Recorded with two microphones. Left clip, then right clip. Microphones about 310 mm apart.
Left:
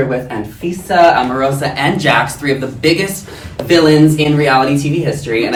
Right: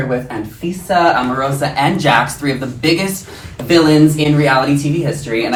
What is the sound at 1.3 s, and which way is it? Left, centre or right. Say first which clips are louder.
Speech: left 1 dB; centre.